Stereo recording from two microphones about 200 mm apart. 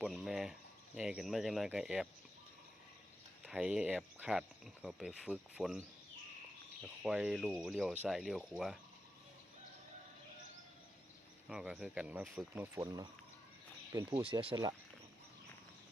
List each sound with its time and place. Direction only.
0.0 s cricket: centre (ahead or behind)
0.9 s speech: 5° right (ahead or behind)
3.4 s speech: 5° right (ahead or behind)
7.0 s speech: 5° right (ahead or behind)
11.4 s speech: 5° right (ahead or behind)
14.1 s speech: 25° right (ahead or behind)